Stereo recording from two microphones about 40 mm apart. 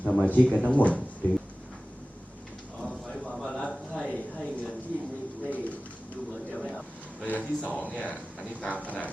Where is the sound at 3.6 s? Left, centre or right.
Left.